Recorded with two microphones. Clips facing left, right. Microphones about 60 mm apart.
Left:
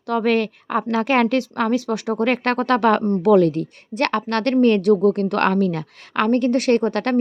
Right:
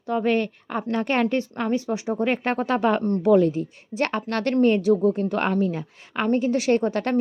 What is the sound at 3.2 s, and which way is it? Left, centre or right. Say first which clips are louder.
A woman's voice: left 3 dB; left.